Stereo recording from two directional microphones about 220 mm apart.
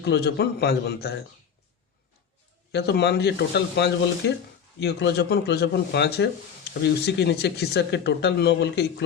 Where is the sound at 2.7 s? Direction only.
50° left (ahead or behind).